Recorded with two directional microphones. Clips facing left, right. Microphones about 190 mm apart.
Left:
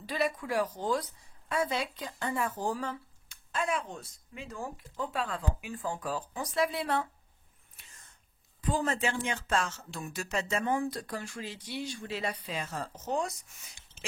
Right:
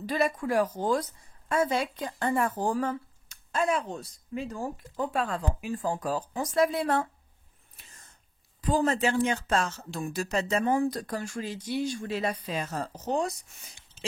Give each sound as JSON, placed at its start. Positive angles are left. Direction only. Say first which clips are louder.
{"t": 0.0, "sound": "a woman's voice", "louder": "right 4 dB", "side_deg": -45}
{"t": 8.6, "sound": "speech", "louder": "right 5 dB", "side_deg": -40}